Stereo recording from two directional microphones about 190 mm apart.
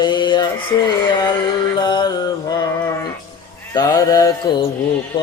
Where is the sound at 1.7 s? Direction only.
25° left (ahead or behind).